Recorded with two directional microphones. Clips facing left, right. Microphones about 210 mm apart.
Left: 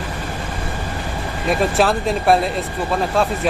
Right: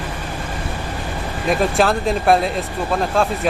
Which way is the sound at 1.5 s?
Centre (ahead or behind).